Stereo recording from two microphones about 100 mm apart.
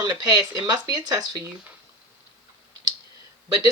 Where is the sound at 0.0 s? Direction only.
45° right (ahead or behind).